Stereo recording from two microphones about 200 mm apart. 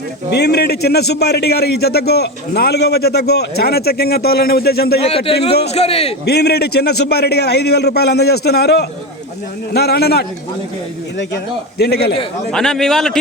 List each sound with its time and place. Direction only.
0.3 s a man's voice: 55° left (ahead or behind)
5.0 s a man's voice: 30° left (ahead or behind)
6.2 s a man's voice: 55° left (ahead or behind)
11.8 s a man's voice: 55° left (ahead or behind)
12.5 s speech: 5° left (ahead or behind)